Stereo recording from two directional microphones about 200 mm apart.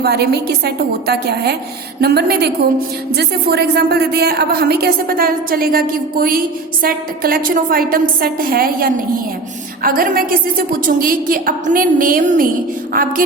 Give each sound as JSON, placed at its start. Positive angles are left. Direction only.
{"t": 0.0, "sound": "a woman's voice", "side_deg": -55}